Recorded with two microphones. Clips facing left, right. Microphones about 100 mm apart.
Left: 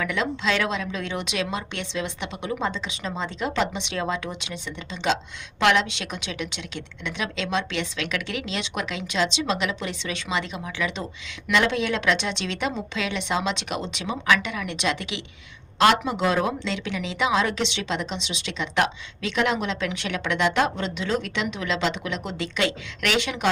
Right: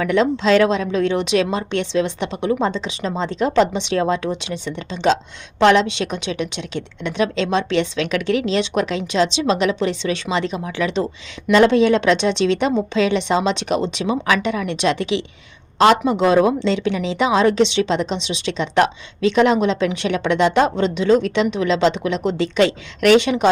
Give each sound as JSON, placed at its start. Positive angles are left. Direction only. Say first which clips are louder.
{"t": 0.0, "sound": "a woman's voice", "louder": "right 9 dB", "side_deg": -35}